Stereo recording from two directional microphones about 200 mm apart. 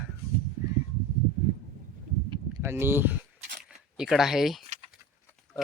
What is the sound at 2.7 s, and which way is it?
Speech, 10° right (ahead or behind).